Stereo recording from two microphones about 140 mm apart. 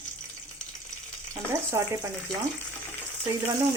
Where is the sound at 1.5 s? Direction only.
20° right (ahead or behind).